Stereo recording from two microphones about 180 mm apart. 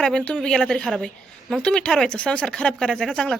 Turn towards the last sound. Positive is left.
turn(degrees=5)  # may be behind; listen again after turning